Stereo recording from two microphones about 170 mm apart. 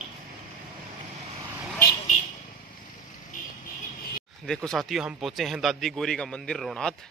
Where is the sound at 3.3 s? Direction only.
50° left (ahead or behind).